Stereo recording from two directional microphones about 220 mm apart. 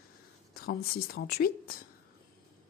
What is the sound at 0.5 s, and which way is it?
Speech, 45° left (ahead or behind).